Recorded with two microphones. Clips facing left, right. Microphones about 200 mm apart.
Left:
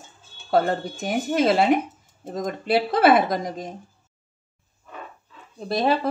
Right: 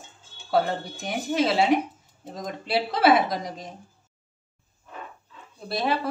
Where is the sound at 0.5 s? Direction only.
50° left (ahead or behind).